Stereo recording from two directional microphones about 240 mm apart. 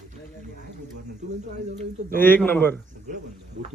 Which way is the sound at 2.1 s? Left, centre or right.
Centre.